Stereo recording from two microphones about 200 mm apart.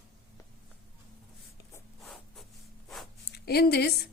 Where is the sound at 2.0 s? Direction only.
Centre (ahead or behind).